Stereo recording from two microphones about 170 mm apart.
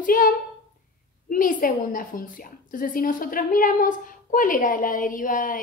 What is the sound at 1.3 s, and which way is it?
A woman's voice, 55° left (ahead or behind).